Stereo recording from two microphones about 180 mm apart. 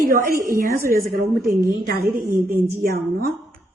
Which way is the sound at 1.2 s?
55° right (ahead or behind).